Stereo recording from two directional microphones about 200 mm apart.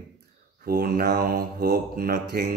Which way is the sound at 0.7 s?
50° right (ahead or behind).